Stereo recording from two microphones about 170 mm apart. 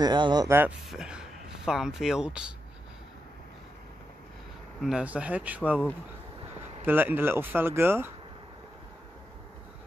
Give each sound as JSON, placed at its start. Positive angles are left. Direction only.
{"t": 0.0, "sound": "speech", "side_deg": -25}
{"t": 0.6, "sound": "speech", "side_deg": -5}
{"t": 4.8, "sound": "speech", "side_deg": -5}
{"t": 6.8, "sound": "speech", "side_deg": -10}